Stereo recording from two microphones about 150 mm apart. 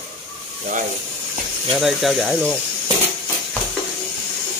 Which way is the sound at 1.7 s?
Centre (ahead or behind).